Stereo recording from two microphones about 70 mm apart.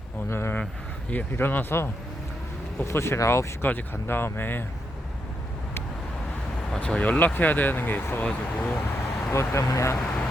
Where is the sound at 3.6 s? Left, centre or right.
Left.